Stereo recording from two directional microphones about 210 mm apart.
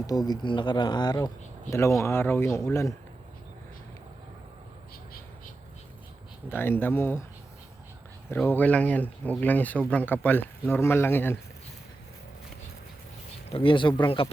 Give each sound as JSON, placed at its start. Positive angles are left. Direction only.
{"t": 0.1, "sound": "speech", "side_deg": 20}
{"t": 6.5, "sound": "speech", "side_deg": 10}
{"t": 8.3, "sound": "speech", "side_deg": 10}
{"t": 13.5, "sound": "speech", "side_deg": 25}